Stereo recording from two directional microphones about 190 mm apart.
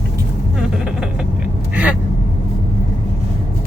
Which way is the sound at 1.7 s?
5° right (ahead or behind).